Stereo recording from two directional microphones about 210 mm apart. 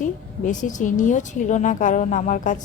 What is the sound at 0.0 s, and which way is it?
A woman's voice, 35° left (ahead or behind).